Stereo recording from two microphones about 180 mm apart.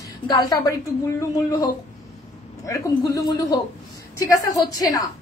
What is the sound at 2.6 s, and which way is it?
A woman's voice, 20° left (ahead or behind).